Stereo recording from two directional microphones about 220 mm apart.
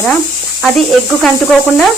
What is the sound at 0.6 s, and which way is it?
Speech, centre (ahead or behind).